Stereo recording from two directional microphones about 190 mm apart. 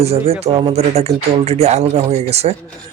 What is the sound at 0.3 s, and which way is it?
Speech, 30° right (ahead or behind).